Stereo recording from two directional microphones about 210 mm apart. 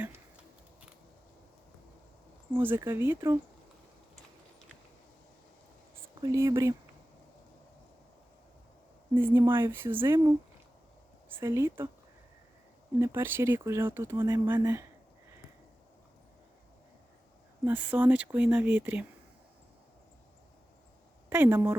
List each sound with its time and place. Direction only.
2.6 s speech: 10° right (ahead or behind)
6.2 s speech: 15° right (ahead or behind)
9.1 s speech: 10° right (ahead or behind)
11.3 s speech: 10° right (ahead or behind)
13.0 s speech: 10° right (ahead or behind)
17.7 s speech: 10° right (ahead or behind)
21.2 s speech: 10° right (ahead or behind)